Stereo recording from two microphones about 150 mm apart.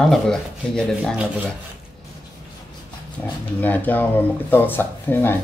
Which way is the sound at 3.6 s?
10° left (ahead or behind).